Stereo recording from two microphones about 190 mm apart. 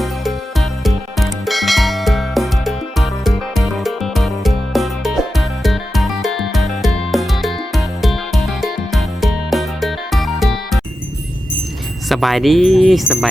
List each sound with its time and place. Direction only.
0.0 s music: centre (ahead or behind)
12.0 s speech: centre (ahead or behind)